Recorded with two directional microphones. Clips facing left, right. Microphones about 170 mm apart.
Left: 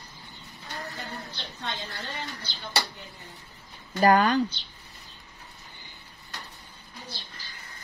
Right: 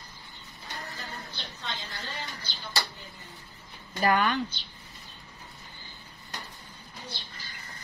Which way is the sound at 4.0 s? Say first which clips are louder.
Left 5 dB; 40° left (ahead or behind).